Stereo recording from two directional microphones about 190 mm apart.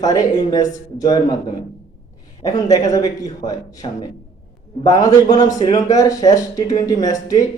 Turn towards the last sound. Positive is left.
turn(degrees=20)  # may be behind; listen again after turning